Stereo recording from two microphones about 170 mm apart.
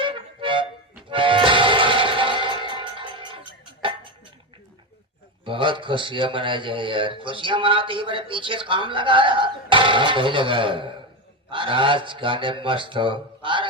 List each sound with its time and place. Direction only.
0.0 s music: 30° right (ahead or behind)
5.5 s a man's voice: 30° right (ahead or behind)